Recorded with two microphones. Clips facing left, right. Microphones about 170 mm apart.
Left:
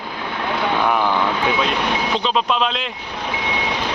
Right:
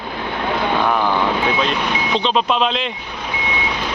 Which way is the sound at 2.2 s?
Centre (ahead or behind).